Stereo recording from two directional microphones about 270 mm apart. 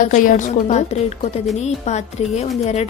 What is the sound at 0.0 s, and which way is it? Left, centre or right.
A woman's voice, left.